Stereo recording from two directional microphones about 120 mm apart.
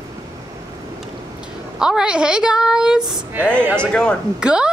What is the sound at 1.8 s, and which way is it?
A woman's voice, 5° right (ahead or behind).